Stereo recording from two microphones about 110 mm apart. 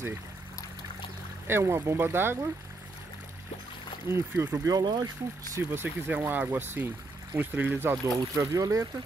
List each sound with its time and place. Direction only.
1.5 s speech: 25° right (ahead or behind)
4.1 s speech: 25° right (ahead or behind)
4.7 s speech: 40° right (ahead or behind)
5.7 s speech: 15° right (ahead or behind)